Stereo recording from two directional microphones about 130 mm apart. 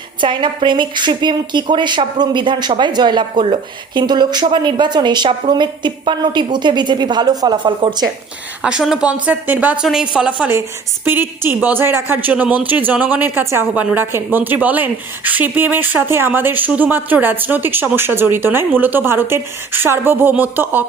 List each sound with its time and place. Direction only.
0.2 s a woman's voice: 35° right (ahead or behind)
8.6 s a woman's voice: 5° right (ahead or behind)